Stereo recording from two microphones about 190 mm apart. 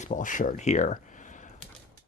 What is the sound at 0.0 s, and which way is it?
Speech, 45° left (ahead or behind).